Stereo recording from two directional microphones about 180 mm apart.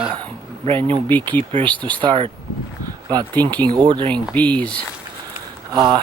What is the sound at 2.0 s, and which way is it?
Speech, 30° right (ahead or behind).